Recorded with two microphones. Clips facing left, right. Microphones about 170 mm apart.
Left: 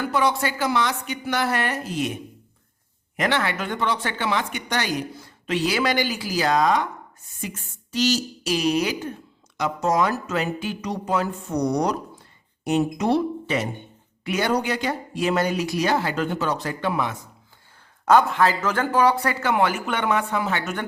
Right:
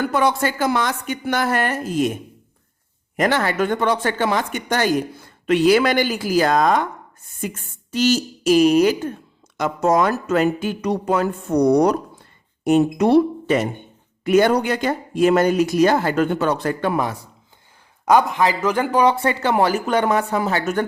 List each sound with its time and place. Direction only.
0.0 s speech: 50° right (ahead or behind)
3.2 s speech: 45° right (ahead or behind)
18.0 s speech: 15° right (ahead or behind); by 20.8 s 40° right (ahead or behind)